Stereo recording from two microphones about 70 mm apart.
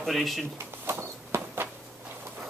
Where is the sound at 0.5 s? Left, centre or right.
Right.